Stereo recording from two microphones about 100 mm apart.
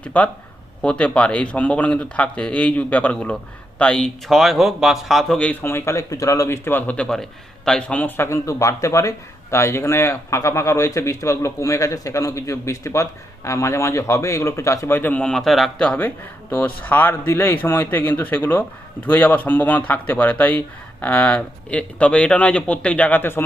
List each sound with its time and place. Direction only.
0.0 s speech: 15° left (ahead or behind)
4.3 s a man's voice: centre (ahead or behind)
5.6 s speech: 25° left (ahead or behind); by 15.7 s centre (ahead or behind)
15.8 s speech: 15° left (ahead or behind)